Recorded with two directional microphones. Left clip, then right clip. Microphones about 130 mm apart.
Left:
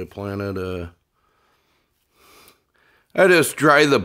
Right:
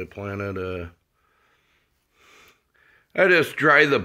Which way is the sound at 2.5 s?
85° left.